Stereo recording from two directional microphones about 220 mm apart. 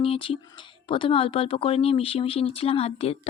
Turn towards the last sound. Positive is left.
turn(degrees=25)  # may be behind; listen again after turning